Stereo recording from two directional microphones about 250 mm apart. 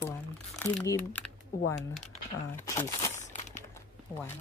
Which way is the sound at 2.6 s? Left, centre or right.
Centre.